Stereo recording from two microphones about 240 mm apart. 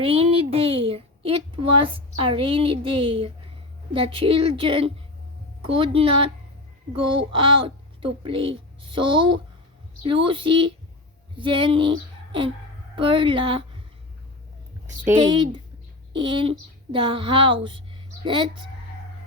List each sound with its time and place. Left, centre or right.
0.0 s a woman's voice: right
15.2 s a woman's voice: right